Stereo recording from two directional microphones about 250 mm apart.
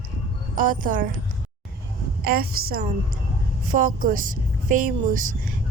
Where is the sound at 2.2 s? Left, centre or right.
Right.